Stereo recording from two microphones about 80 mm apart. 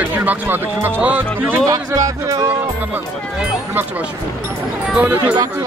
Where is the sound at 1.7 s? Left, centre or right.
Right.